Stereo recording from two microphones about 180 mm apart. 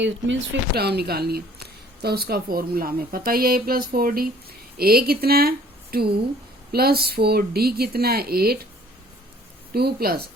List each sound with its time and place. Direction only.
0.0 s speech: 85° right; by 8.5 s 60° right (ahead or behind)
9.7 s speech: 60° right (ahead or behind)